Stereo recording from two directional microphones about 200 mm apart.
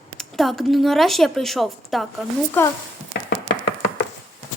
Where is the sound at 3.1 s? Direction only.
55° left (ahead or behind).